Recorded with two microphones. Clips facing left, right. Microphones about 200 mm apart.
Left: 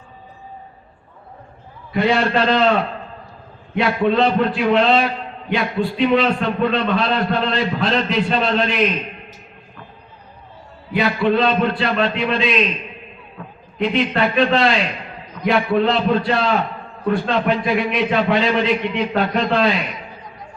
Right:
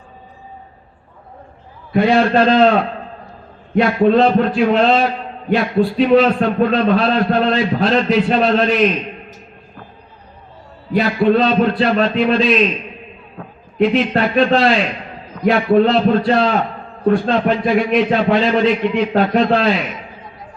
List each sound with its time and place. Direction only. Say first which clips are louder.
1.9 s a man's voice: right 4 dB; 50° right (ahead or behind)
10.9 s a man's voice: right 3 dB; 40° right (ahead or behind)
13.8 s a man's voice: right 3 dB; 45° right (ahead or behind)
17.0 s a man's voice: right 5 dB; 35° right (ahead or behind)
17.3 s a man's voice: right 3 dB; 45° right (ahead or behind)